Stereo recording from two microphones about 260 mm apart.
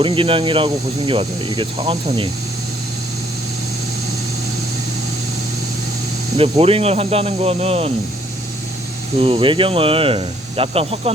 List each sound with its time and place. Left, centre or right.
0.0 s speech: right
6.3 s speech: right
9.2 s speech: right